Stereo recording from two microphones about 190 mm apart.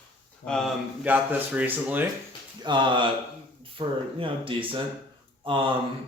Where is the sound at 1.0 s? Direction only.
10° right (ahead or behind).